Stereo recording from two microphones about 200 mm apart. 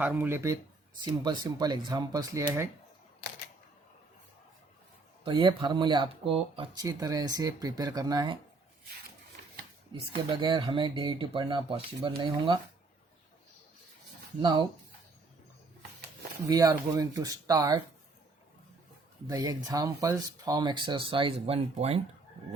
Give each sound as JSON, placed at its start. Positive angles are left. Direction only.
{"t": 0.0, "sound": "speech", "side_deg": -10}
{"t": 0.9, "sound": "speech", "side_deg": -20}
{"t": 5.2, "sound": "speech", "side_deg": -25}
{"t": 10.4, "sound": "speech", "side_deg": -25}
{"t": 16.5, "sound": "speech", "side_deg": -20}
{"t": 19.3, "sound": "speech", "side_deg": -20}